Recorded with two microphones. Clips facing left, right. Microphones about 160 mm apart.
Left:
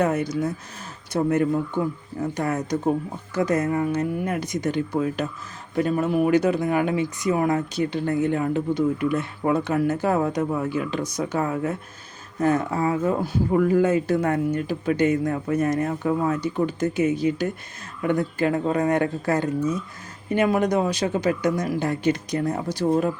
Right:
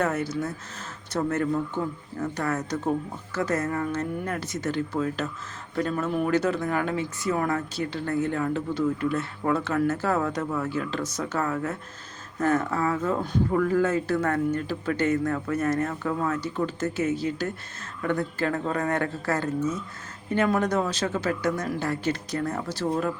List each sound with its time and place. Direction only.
0.0 s speech: 15° left (ahead or behind)